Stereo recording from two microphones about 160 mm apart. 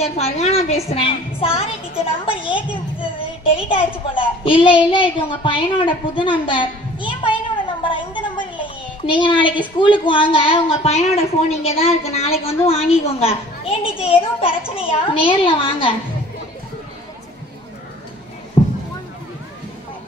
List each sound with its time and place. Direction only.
0.0 s a woman's voice: 40° left (ahead or behind)
7.9 s a sound: 30° left (ahead or behind)
9.0 s a woman's voice: 30° left (ahead or behind)
18.6 s music: 30° left (ahead or behind)